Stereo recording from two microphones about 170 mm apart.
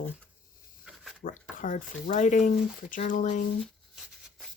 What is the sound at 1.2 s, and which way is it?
Speech, 50° left (ahead or behind).